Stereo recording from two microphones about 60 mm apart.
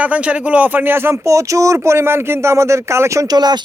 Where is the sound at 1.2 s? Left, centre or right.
Right.